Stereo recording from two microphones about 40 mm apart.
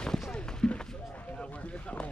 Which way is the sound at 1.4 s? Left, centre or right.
Left.